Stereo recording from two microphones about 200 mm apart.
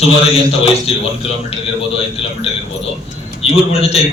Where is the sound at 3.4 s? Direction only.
30° left (ahead or behind).